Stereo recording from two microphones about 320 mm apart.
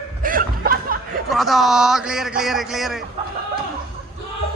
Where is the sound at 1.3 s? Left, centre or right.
Centre.